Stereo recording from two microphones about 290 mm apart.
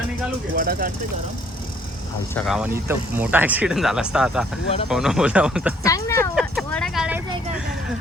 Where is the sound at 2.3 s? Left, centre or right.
Centre.